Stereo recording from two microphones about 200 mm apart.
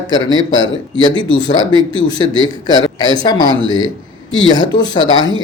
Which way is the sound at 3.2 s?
20° left (ahead or behind).